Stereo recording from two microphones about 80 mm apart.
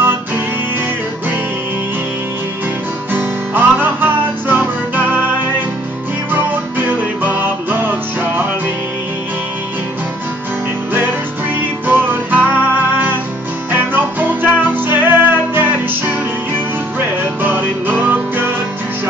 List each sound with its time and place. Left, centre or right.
3.1 s music: right
7.2 s music: right
11.9 s music: right
17.4 s music: right